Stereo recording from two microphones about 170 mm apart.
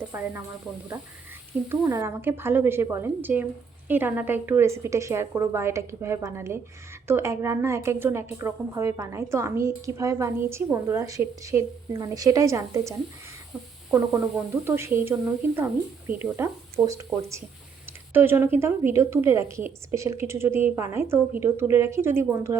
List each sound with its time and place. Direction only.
0.1 s speech: 15° right (ahead or behind)
1.7 s a woman's voice: 15° right (ahead or behind)
13.9 s a woman's voice: 15° right (ahead or behind)